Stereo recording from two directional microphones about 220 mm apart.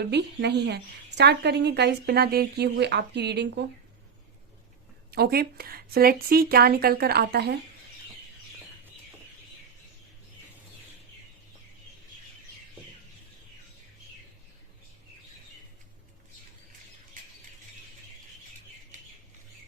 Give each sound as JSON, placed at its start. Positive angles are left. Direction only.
{"t": 0.1, "sound": "a woman's voice", "side_deg": -50}
{"t": 5.1, "sound": "a woman's voice", "side_deg": -45}